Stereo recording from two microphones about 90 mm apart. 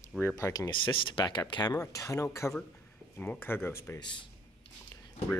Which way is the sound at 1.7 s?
40° left (ahead or behind).